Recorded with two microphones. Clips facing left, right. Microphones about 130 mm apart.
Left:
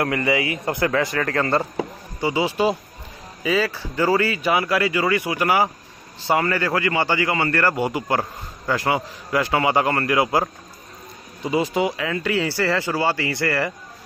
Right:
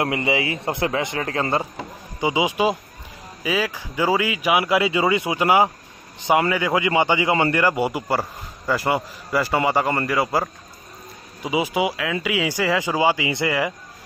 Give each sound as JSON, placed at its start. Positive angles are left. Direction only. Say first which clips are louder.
{"t": 0.0, "sound": "a man's voice", "louder": "left 1 dB", "side_deg": -20}
{"t": 11.4, "sound": "speech", "louder": "left 1 dB", "side_deg": -10}